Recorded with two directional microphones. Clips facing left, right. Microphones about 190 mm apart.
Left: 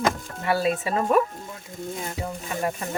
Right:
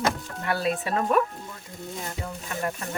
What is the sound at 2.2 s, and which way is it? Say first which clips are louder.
Speech: left 3 dB; 15° left (ahead or behind).